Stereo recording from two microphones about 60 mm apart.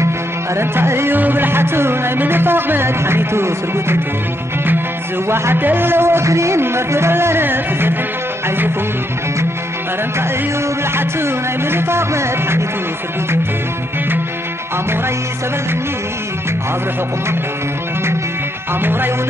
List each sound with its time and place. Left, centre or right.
0.6 s music: right
5.3 s a man's voice: right
8.5 s music: right
11.0 s a man's voice: right
18.8 s music: right